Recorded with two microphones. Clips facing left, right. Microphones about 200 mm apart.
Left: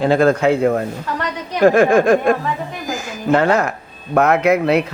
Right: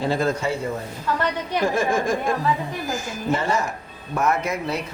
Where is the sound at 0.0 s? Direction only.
65° left (ahead or behind).